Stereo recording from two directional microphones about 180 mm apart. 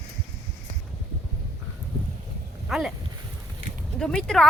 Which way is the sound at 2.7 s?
Centre (ahead or behind).